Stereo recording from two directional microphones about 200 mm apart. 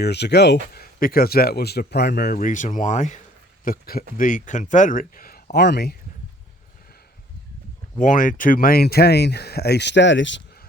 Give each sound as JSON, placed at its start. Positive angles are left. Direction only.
{"t": 0.0, "sound": "speech", "side_deg": 55}
{"t": 7.9, "sound": "speech", "side_deg": 40}